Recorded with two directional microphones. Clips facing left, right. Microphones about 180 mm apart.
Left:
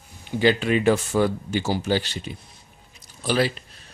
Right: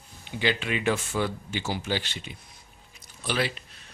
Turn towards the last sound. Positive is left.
turn(degrees=35)  # may be behind; listen again after turning